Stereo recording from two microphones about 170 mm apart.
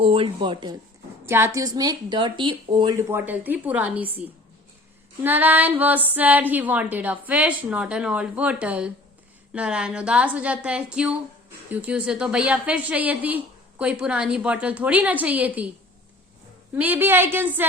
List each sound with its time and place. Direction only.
0.0 s a woman's voice: 30° right (ahead or behind)
1.2 s a woman's voice: 15° right (ahead or behind)
3.1 s a woman's voice: 10° right (ahead or behind)
16.7 s a woman's voice: 10° right (ahead or behind)